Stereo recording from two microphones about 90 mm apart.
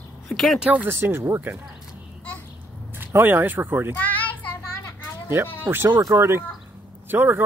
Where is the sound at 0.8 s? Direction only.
25° right (ahead or behind).